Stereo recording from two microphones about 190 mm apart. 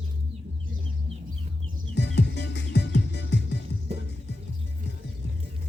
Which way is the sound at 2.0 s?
65° left (ahead or behind).